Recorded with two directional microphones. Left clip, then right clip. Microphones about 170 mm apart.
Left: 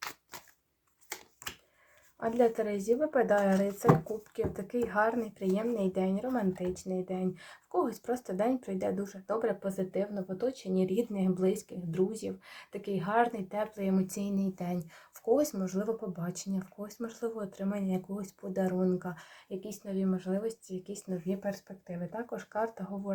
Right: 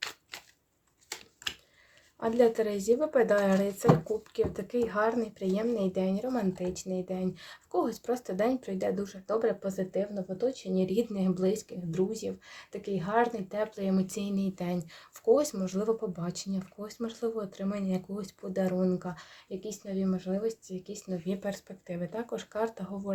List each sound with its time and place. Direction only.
2.1 s speech: 20° right (ahead or behind)
11.9 s speech: 10° right (ahead or behind)
21.2 s speech: 35° right (ahead or behind)